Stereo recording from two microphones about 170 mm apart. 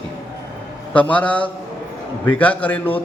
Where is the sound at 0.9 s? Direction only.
10° left (ahead or behind).